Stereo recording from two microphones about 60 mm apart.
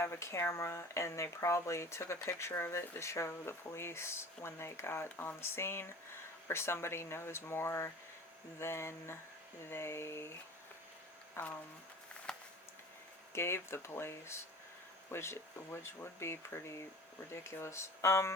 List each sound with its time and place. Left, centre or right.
0.0 s speech: left
11.4 s speech: left
12.3 s a sound: centre
13.3 s speech: left